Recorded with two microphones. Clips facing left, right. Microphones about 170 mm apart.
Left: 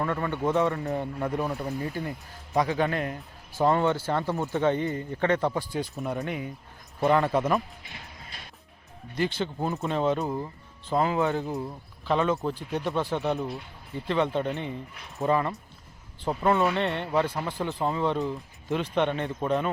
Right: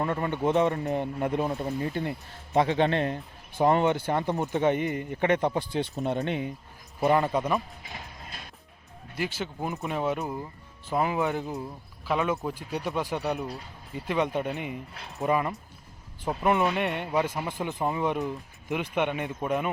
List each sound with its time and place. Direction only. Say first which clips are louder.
0.0 s speech: right 1 dB; 20° right (ahead or behind)
9.1 s speech: left 4 dB; 5° right (ahead or behind)